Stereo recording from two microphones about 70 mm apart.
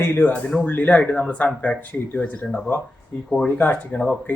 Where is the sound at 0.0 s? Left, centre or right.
Left.